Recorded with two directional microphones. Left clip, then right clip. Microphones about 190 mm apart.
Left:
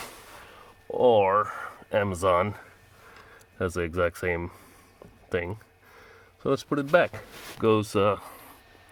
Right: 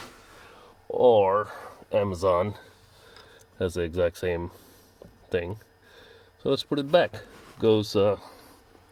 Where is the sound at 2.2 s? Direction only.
25° left (ahead or behind).